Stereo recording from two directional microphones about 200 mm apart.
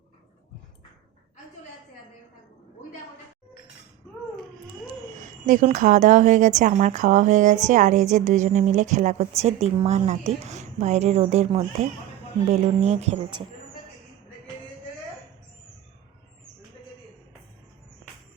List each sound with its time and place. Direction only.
5.1 s a woman's voice: 40° right (ahead or behind)